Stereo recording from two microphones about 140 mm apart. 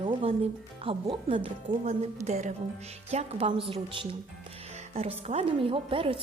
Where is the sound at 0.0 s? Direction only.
40° right (ahead or behind).